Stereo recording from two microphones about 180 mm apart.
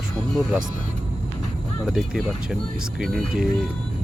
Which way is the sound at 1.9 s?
Centre (ahead or behind).